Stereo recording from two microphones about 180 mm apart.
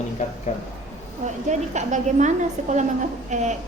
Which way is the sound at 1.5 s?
40° right (ahead or behind).